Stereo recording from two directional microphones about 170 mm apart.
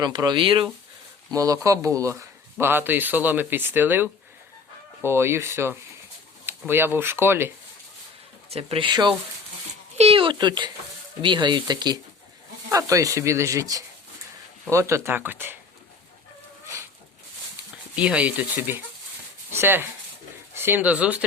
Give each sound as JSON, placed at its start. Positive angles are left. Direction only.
{"t": 0.0, "sound": "speech", "side_deg": -25}
{"t": 8.4, "sound": "speech", "side_deg": -35}
{"t": 17.9, "sound": "speech", "side_deg": -5}